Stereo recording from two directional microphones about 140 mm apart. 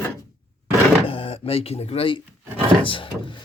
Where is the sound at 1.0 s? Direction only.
40° left (ahead or behind).